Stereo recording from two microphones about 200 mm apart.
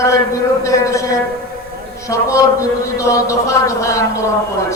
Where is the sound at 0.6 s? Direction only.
15° left (ahead or behind).